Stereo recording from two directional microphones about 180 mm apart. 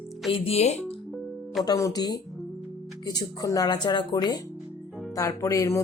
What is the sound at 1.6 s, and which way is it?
Speech, 20° left (ahead or behind).